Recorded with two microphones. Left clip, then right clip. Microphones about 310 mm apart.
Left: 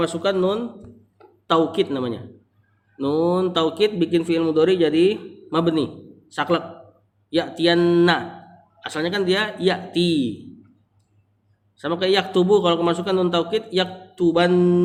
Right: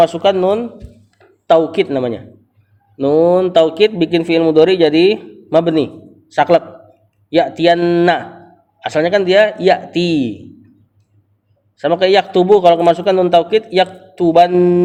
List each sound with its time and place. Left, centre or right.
0.0 s a man's voice: right
11.8 s a man's voice: centre